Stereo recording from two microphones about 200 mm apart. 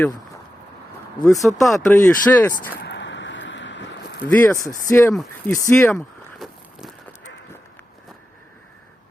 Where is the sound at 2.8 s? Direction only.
60° left (ahead or behind).